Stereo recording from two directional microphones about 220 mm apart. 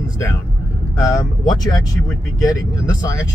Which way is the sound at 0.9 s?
15° left (ahead or behind).